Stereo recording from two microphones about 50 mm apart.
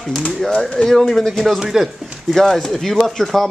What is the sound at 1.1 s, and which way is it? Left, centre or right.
Speech, centre.